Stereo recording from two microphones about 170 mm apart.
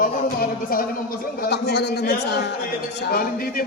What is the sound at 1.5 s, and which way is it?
A man's voice, 80° left.